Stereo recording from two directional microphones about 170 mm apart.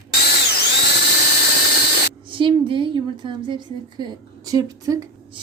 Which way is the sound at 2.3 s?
30° right (ahead or behind).